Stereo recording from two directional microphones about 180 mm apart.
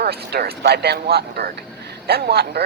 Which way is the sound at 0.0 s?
60° right (ahead or behind).